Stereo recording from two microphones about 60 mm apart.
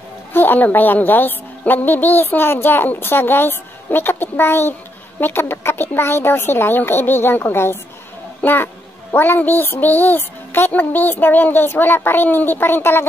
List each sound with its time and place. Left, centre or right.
0.3 s a child's voice: left